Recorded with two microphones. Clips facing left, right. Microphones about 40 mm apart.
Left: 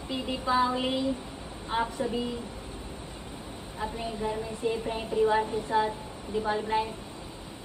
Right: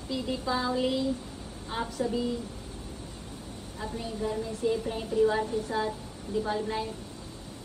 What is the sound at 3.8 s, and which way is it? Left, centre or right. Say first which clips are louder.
A woman's voice: left 1 dB; left.